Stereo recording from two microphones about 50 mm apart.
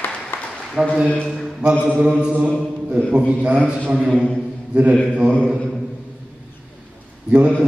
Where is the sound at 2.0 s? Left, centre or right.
Centre.